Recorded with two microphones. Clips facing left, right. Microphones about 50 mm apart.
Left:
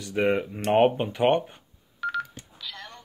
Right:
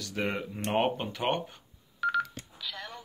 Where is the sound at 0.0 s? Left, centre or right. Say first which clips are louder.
Left 8 dB; left.